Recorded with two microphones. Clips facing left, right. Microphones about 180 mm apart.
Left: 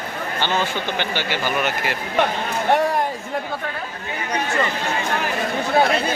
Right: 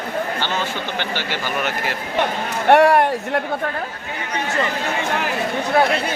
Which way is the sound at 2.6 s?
70° right (ahead or behind).